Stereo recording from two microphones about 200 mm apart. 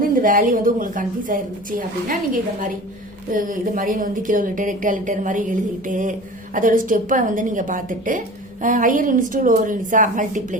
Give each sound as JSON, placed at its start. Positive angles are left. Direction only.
{"t": 0.0, "sound": "a woman's voice", "side_deg": -45}
{"t": 3.3, "sound": "a woman's voice", "side_deg": -40}